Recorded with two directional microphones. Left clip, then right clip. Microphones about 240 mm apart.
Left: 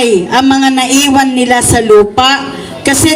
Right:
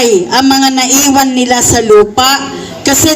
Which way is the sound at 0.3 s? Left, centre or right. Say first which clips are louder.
Even; centre.